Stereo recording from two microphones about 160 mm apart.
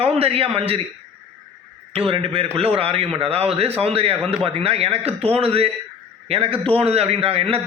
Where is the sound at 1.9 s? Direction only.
35° right (ahead or behind).